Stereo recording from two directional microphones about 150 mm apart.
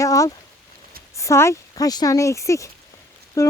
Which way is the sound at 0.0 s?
20° left (ahead or behind).